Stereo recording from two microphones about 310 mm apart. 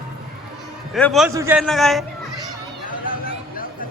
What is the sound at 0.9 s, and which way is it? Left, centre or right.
A man's voice, centre.